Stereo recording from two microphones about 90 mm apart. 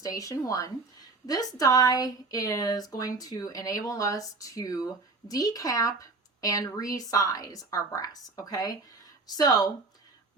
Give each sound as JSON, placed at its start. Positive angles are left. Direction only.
{"t": 0.0, "sound": "a woman's voice", "side_deg": 40}